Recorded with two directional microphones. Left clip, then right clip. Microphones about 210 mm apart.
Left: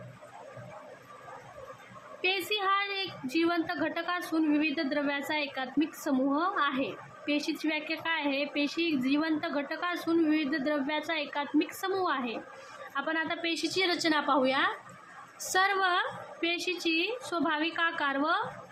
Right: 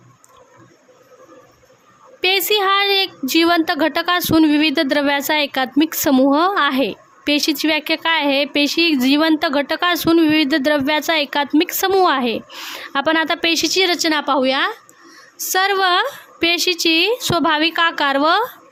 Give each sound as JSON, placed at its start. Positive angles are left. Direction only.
{"t": 2.2, "sound": "a woman's voice", "side_deg": -55}